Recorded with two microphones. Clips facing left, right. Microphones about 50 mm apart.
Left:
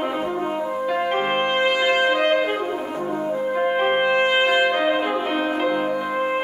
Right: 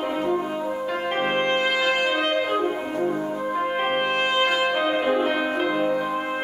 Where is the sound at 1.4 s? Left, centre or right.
Left.